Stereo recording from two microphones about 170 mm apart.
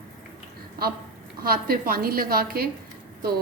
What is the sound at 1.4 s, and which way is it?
A woman's voice, 60° right (ahead or behind).